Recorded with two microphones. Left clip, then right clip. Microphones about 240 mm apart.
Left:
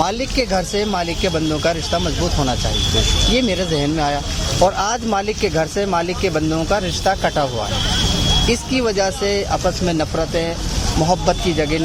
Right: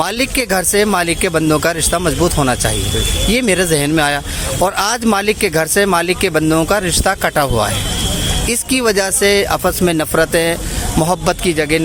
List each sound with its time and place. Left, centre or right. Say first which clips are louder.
0.0 s speech: right 2 dB; right